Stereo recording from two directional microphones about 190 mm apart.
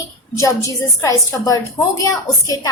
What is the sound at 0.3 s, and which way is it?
A woman's voice, 15° left (ahead or behind).